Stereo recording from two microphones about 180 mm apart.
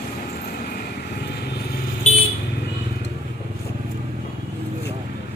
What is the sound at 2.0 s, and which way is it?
Vehicle, 40° left (ahead or behind).